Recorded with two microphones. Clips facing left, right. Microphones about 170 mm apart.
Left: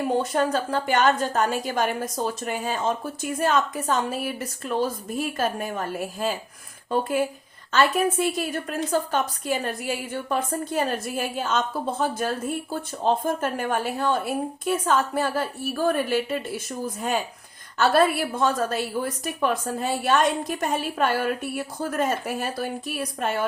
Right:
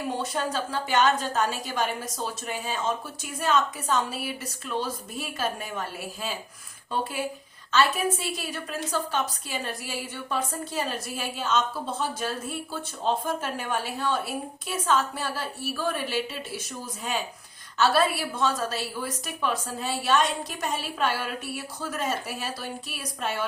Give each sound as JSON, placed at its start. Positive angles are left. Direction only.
{"t": 0.2, "sound": "a woman's voice", "side_deg": 50}